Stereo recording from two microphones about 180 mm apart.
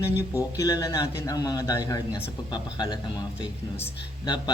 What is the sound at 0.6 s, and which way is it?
Speech, 20° left (ahead or behind).